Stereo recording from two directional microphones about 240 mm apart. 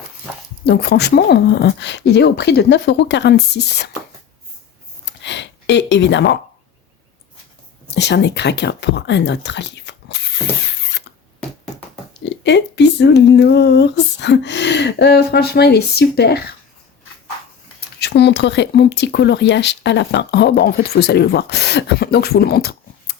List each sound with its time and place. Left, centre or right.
0.6 s speech: left
5.0 s a sound: left
7.9 s speech: left
12.2 s speech: left
17.7 s speech: left